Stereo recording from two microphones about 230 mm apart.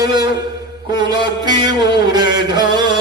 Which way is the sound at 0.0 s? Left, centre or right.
Centre.